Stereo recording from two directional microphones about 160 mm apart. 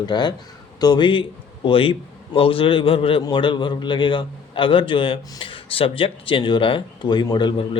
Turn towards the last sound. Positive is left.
turn(degrees=30)  # may be behind; listen again after turning